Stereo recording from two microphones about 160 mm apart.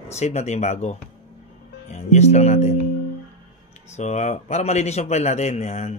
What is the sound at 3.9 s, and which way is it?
Speech, 45° left (ahead or behind).